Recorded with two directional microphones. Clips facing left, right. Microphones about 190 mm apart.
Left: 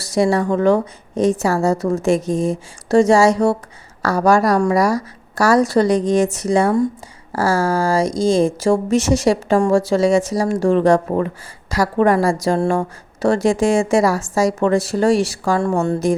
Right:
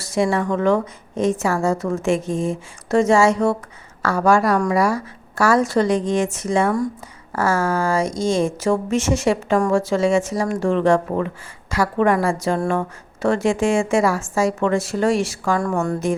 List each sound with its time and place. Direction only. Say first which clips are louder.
0.0 s speech: left 3 dB; 40° left (ahead or behind)